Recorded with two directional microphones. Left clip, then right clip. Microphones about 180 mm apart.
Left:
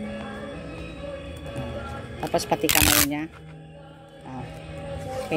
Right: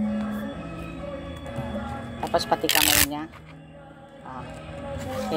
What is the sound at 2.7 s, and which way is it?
Speech, 35° left (ahead or behind).